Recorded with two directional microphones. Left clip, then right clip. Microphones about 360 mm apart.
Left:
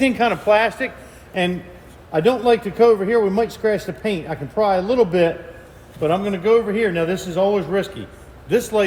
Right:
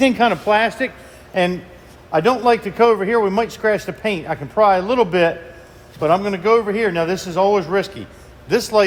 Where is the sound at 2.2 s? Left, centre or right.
Centre.